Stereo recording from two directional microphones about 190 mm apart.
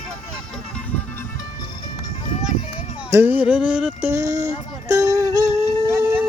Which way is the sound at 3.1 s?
15° right (ahead or behind).